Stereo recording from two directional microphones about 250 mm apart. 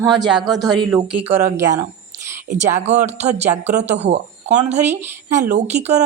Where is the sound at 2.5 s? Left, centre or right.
Right.